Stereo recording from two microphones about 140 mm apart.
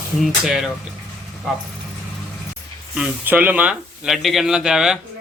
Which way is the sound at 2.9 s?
10° right (ahead or behind).